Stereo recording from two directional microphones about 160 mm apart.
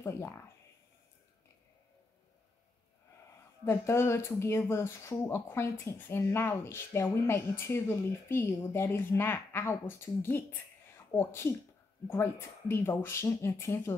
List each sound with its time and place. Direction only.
0.0 s speech: 15° left (ahead or behind)
3.6 s speech: 15° left (ahead or behind)